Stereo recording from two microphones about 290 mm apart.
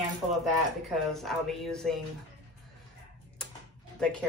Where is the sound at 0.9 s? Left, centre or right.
Centre.